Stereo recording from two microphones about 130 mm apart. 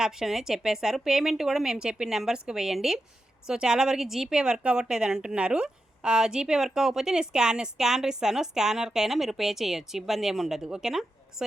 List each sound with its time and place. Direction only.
0.0 s a woman's voice: 5° right (ahead or behind)